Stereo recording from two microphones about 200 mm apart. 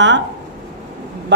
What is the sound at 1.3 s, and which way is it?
Speech, 65° right (ahead or behind).